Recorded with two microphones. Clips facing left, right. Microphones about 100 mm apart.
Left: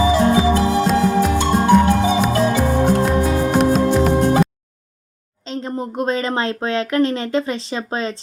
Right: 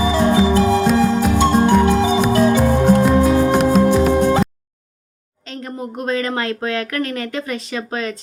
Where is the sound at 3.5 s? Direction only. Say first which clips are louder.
Right 1 dB; centre (ahead or behind).